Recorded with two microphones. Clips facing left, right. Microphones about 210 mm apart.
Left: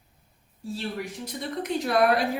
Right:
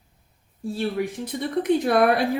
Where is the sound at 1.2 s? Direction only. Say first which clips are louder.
Right 8 dB; 50° right (ahead or behind).